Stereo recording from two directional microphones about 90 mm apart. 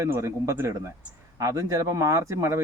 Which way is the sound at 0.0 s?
30° right (ahead or behind).